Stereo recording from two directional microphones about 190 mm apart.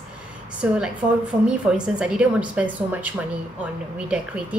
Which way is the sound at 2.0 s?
5° right (ahead or behind).